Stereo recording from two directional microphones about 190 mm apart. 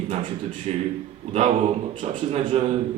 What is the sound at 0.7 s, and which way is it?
Speech, 35° right (ahead or behind).